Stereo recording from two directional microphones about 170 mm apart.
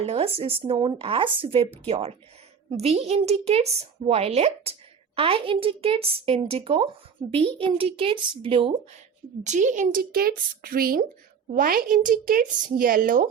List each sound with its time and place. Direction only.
0.0 s speech: 35° right (ahead or behind)
9.4 s speech: 45° right (ahead or behind)